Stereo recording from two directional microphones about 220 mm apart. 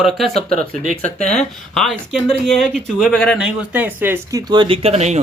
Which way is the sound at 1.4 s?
Centre (ahead or behind).